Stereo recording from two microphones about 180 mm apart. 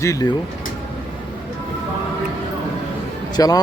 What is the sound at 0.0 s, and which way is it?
Speech, 20° left (ahead or behind).